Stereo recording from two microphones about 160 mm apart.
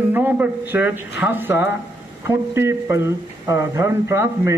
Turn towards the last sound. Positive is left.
turn(degrees=-15)  # may be behind; listen again after turning